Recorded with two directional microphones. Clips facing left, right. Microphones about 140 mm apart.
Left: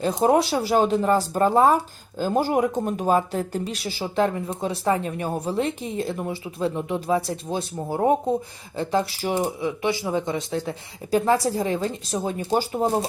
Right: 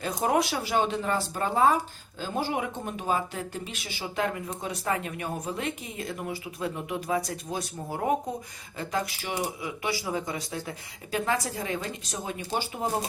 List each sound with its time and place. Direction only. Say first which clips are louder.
0.0 s speech: left 6 dB; 30° left (ahead or behind)
9.6 s speech: left 7 dB; 25° left (ahead or behind); by 12.8 s 40° left (ahead or behind)